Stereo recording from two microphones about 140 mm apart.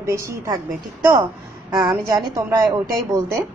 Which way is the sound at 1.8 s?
25° right (ahead or behind).